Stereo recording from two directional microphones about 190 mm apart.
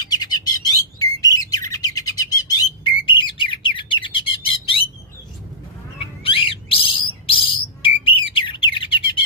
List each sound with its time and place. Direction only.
0.0 s bird: 20° left (ahead or behind)
6.2 s bird: 30° left (ahead or behind)